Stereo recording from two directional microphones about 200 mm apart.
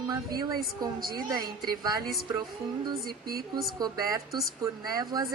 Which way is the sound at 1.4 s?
45° right (ahead or behind).